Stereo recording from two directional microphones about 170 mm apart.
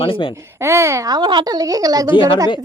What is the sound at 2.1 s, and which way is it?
Speech, 30° left (ahead or behind).